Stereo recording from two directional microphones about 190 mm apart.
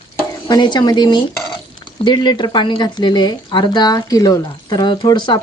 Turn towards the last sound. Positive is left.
turn(degrees=20)  # may be behind; listen again after turning